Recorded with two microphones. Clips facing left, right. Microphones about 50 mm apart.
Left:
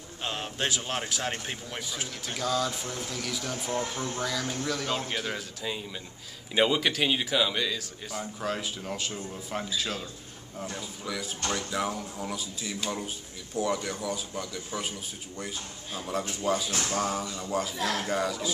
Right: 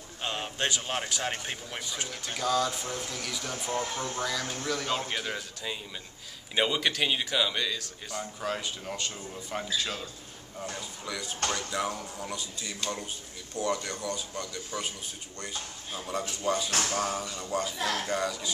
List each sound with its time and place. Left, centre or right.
0.2 s a man's voice: centre